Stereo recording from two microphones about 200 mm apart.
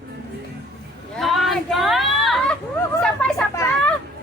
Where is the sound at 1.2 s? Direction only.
Centre (ahead or behind).